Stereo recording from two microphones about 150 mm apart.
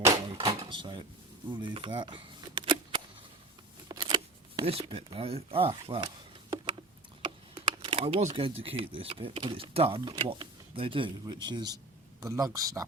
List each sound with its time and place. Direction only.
0.3 s drawer open or close: 40° right (ahead or behind)
1.5 s camera: 30° right (ahead or behind)
3.8 s scissors: 30° right (ahead or behind)
4.7 s speech: 40° right (ahead or behind)
7.3 s computer keyboard: 30° right (ahead or behind)
8.4 s speech: 40° right (ahead or behind); by 12.8 s 20° right (ahead or behind)